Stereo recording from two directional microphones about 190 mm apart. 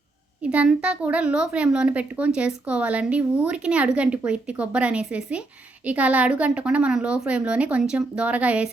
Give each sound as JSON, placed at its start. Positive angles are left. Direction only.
{"t": 0.4, "sound": "a woman's voice", "side_deg": -5}